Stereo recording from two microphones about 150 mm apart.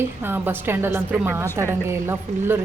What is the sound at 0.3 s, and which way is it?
A woman's voice, 15° right (ahead or behind).